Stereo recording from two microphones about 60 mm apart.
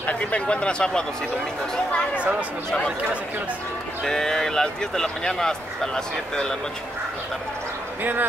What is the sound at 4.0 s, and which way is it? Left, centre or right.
Speech, centre.